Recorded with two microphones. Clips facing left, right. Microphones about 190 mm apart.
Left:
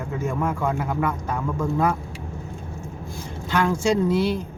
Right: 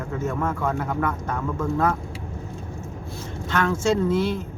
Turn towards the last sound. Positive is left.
turn(degrees=10)  # may be behind; listen again after turning